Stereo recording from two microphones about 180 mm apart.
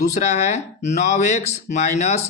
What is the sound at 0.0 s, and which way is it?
Speech, 40° left (ahead or behind).